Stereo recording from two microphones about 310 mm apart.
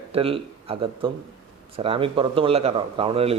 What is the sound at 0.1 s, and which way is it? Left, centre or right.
A man's voice, centre.